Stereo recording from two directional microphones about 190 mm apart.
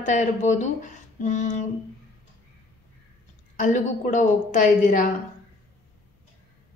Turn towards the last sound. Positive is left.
turn(degrees=45)  # may be behind; listen again after turning